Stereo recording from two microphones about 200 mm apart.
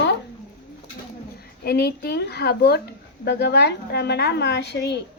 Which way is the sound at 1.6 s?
50° left (ahead or behind).